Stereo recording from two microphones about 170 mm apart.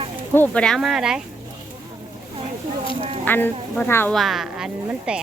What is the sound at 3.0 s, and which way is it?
Speech, 35° right (ahead or behind).